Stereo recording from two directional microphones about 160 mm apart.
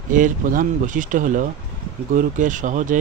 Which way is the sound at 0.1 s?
55° right (ahead or behind).